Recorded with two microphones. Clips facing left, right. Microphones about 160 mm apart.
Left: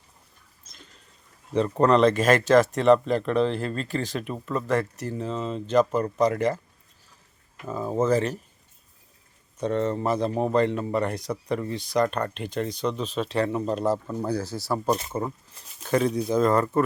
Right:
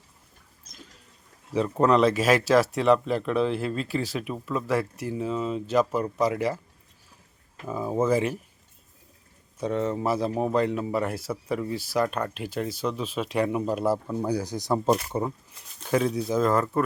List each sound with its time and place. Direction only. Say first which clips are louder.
1.5 s speech: left 1 dB; 5° right (ahead or behind)
7.7 s speech: left 1 dB; 10° right (ahead or behind)
9.6 s speech: left 1 dB; 5° right (ahead or behind)
15.8 s speech: left 1 dB; centre (ahead or behind)